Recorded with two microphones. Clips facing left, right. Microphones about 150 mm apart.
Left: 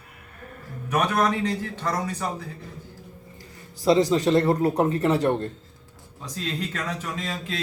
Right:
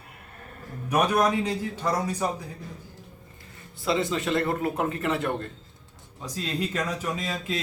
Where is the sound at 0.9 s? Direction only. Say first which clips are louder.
Even; 10° right (ahead or behind).